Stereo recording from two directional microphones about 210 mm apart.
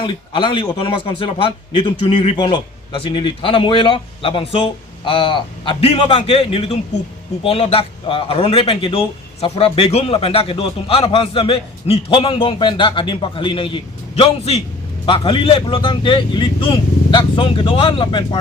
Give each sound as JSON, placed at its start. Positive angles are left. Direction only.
{"t": 0.0, "sound": "a man's voice", "side_deg": 25}